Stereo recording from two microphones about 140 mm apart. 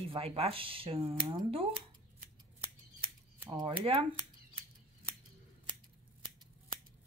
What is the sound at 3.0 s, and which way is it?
Scissors, 40° right (ahead or behind).